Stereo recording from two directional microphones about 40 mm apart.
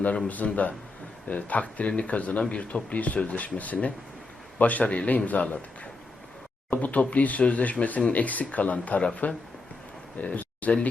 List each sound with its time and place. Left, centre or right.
0.3 s speech: left
6.7 s speech: left
10.2 s speech: left